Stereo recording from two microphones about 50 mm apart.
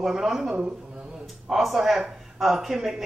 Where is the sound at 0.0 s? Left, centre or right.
Centre.